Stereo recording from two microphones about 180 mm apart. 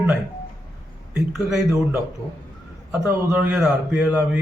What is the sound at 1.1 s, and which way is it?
Speech, centre (ahead or behind).